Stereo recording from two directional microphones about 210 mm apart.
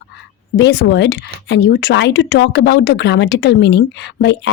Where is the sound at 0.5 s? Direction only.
55° left (ahead or behind).